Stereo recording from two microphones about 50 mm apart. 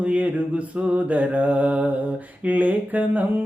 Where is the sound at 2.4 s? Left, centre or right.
Right.